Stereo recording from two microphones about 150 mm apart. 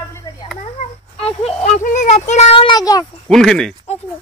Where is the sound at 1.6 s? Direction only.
55° left (ahead or behind); by 3.1 s 25° left (ahead or behind).